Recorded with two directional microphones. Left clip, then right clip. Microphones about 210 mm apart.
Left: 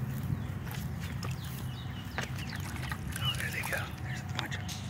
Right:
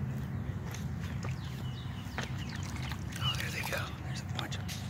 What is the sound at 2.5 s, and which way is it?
Duck, 5° left (ahead or behind).